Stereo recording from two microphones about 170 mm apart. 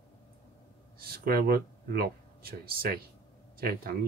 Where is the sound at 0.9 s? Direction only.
60° right (ahead or behind).